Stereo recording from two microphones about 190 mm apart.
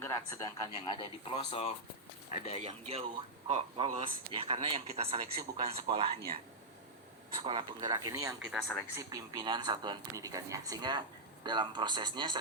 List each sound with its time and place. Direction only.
0.0 s speech: 15° left (ahead or behind); by 2.6 s 35° left (ahead or behind)
2.6 s speech: 30° right (ahead or behind)
7.3 s speech: 25° right (ahead or behind)
8.4 s speech: centre (ahead or behind)
9.0 s speech: 20° right (ahead or behind)